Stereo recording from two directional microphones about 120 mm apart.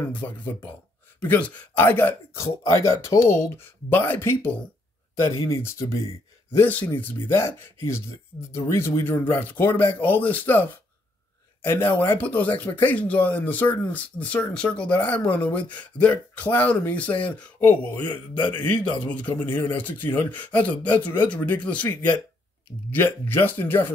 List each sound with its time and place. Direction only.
0.1 s speech: 15° left (ahead or behind)
18.4 s a man's voice: 35° left (ahead or behind)
18.9 s speech: 10° left (ahead or behind)
22.8 s speech: 15° left (ahead or behind)